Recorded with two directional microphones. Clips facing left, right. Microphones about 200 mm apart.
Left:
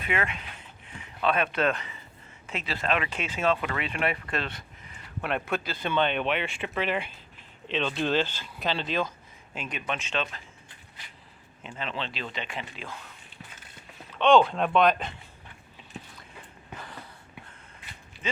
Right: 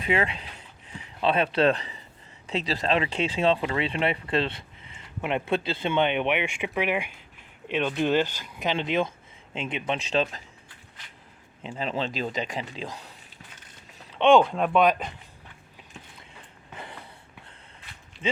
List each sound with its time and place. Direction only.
0.0 s speech: 30° right (ahead or behind)
11.6 s speech: 35° right (ahead or behind)
14.2 s speech: 20° right (ahead or behind)
14.5 s speech: 5° right (ahead or behind)
16.7 s a sound: 25° right (ahead or behind)